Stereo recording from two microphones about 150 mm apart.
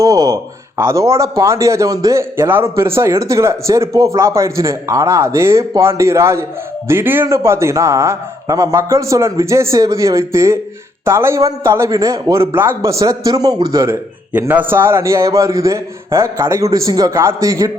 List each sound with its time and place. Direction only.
0.0 s a man's voice: 25° right (ahead or behind)